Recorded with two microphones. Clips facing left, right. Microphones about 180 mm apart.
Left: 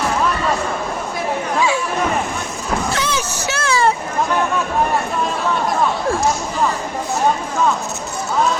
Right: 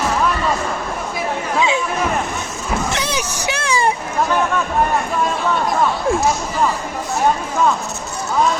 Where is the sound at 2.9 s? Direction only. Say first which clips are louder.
Left 1 dB; 15° right (ahead or behind).